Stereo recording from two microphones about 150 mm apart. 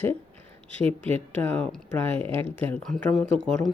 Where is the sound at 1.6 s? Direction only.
10° left (ahead or behind).